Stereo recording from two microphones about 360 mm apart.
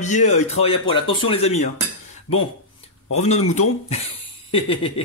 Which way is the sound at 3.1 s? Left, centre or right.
Centre.